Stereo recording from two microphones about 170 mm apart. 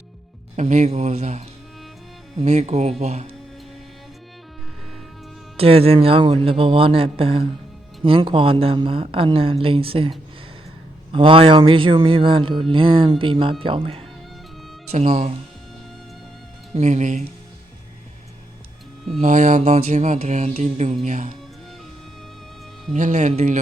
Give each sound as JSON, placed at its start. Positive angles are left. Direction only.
{"t": 0.5, "sound": "music", "side_deg": -45}
{"t": 2.4, "sound": "speech", "side_deg": -40}
{"t": 5.5, "sound": "speech", "side_deg": -35}
{"t": 14.9, "sound": "music", "side_deg": -45}
{"t": 16.7, "sound": "music", "side_deg": -45}
{"t": 19.2, "sound": "music", "side_deg": -45}
{"t": 22.9, "sound": "music", "side_deg": -45}